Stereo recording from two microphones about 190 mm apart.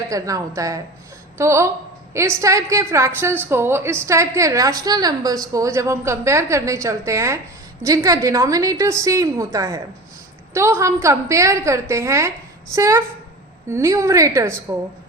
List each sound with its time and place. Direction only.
0.1 s a woman's voice: 15° right (ahead or behind)